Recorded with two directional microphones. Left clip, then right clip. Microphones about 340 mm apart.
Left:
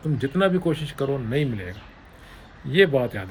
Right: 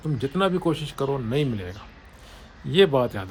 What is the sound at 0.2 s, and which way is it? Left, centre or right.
Speech, centre.